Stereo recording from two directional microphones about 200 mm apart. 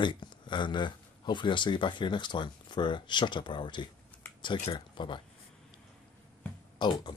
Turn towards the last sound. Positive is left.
turn(degrees=20)  # may be behind; listen again after turning